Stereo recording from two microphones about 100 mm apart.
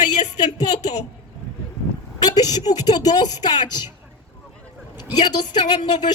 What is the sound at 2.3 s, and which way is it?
A man's voice, 45° left (ahead or behind).